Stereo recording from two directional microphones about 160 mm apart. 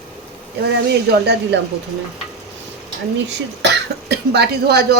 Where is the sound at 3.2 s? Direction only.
90° right.